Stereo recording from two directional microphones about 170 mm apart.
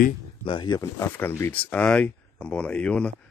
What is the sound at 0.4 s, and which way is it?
Speech, 30° left (ahead or behind).